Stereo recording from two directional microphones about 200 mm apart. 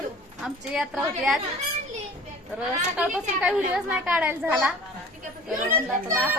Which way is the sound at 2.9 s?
5° right (ahead or behind).